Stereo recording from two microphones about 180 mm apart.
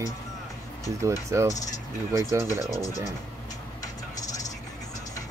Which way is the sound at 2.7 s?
20° left (ahead or behind).